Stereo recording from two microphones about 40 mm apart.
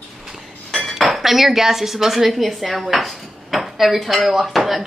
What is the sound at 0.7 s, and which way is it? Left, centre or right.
Cutlery, centre.